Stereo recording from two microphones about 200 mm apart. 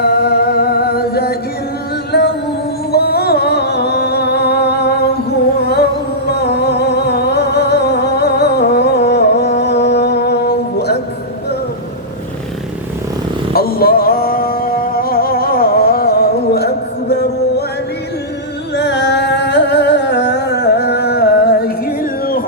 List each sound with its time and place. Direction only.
0.0 s music: 50° left (ahead or behind)
13.5 s music: 50° left (ahead or behind)
18.8 s music: 60° left (ahead or behind)